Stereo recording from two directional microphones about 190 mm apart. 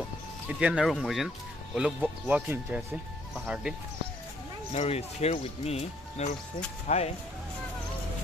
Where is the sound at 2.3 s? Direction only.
5° right (ahead or behind).